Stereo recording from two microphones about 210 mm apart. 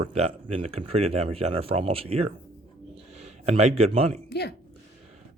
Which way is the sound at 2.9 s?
30° right (ahead or behind).